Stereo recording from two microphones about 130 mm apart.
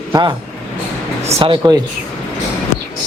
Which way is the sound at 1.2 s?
55° right (ahead or behind).